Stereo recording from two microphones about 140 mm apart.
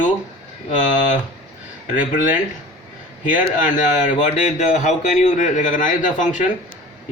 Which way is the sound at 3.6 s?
65° left (ahead or behind).